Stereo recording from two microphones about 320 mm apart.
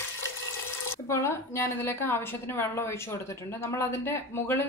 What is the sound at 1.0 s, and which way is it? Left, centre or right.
A woman's voice, centre.